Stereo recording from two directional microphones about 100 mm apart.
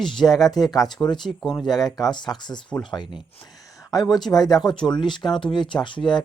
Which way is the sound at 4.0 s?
Centre (ahead or behind).